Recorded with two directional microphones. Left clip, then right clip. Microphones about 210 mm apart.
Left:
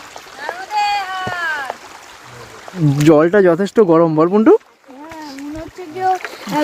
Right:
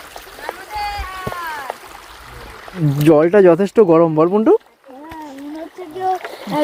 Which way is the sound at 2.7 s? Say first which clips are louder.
Left 2 dB; 40° right (ahead or behind).